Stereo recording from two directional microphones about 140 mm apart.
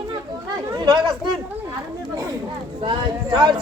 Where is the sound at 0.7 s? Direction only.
30° right (ahead or behind).